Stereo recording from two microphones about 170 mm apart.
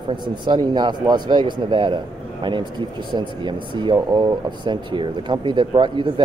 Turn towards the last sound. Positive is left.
turn(degrees=-25)  # may be behind; listen again after turning